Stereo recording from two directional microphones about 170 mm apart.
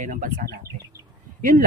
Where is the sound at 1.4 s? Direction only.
50° right (ahead or behind).